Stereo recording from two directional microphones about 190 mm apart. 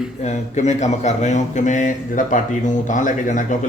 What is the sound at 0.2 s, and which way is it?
A man's voice, 35° left (ahead or behind).